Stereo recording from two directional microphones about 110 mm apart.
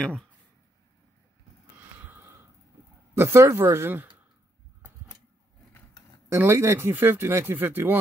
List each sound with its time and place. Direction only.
2.0 s a sound: 20° right (ahead or behind)
3.2 s speech: 20° right (ahead or behind)
6.2 s speech: 20° right (ahead or behind)